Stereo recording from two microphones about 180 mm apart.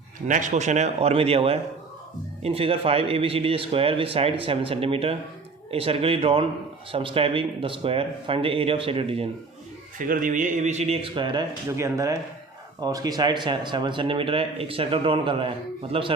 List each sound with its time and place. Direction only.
0.3 s speech: 45° right (ahead or behind)
10.0 s speech: 50° right (ahead or behind); by 16.1 s 30° right (ahead or behind)